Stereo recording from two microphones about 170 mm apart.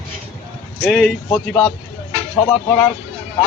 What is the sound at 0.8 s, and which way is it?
Speech, centre (ahead or behind).